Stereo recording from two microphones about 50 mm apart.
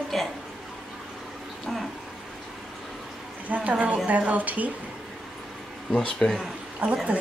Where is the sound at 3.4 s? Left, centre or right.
Right.